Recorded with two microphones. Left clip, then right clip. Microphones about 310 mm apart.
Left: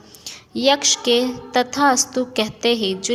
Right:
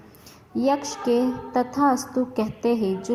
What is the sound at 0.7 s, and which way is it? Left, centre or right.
A woman's voice, left.